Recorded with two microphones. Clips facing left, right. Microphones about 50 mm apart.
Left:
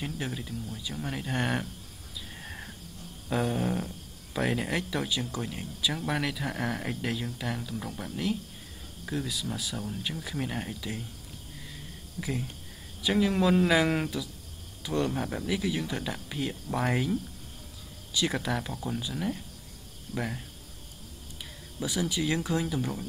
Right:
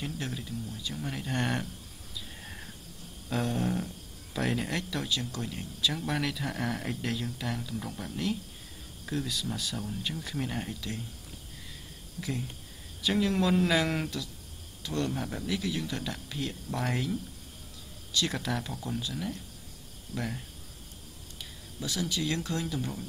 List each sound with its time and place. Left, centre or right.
0.0 s speech: centre
2.4 s a sound: centre
3.3 s speech: centre
12.2 s speech: centre
21.7 s speech: centre